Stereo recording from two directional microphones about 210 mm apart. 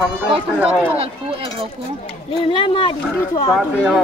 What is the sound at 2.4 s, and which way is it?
Speech, 25° left (ahead or behind).